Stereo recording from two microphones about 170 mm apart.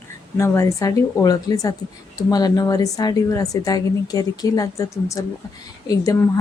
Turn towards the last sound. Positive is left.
turn(degrees=20)  # may be behind; listen again after turning